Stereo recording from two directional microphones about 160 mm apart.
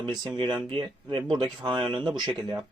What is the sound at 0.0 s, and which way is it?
Speech, 25° right (ahead or behind).